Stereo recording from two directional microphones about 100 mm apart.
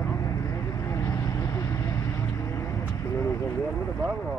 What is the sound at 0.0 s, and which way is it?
Vehicle, 30° left (ahead or behind).